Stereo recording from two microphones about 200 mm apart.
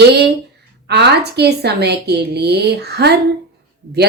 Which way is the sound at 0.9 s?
55° right (ahead or behind).